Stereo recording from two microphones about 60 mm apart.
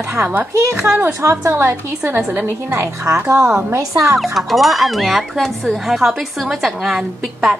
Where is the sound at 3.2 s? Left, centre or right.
Right.